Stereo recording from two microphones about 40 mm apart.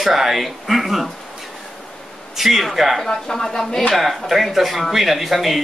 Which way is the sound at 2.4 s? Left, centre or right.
Centre.